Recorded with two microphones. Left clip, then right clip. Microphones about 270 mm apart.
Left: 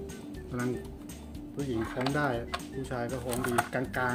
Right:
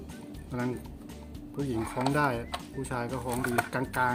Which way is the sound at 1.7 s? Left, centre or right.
Centre.